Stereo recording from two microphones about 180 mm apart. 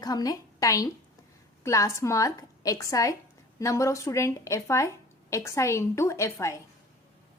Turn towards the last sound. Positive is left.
turn(degrees=15)  # may be behind; listen again after turning